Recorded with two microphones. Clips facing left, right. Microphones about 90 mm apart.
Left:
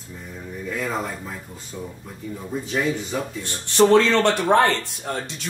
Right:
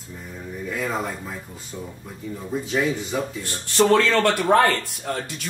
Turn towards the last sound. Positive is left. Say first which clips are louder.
# even
turn(degrees=25)  # may be behind; listen again after turning